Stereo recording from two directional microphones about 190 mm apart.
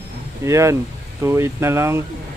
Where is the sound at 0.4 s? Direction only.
15° right (ahead or behind).